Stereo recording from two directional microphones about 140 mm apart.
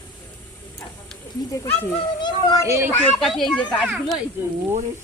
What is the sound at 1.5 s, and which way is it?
A child's voice, 25° left (ahead or behind).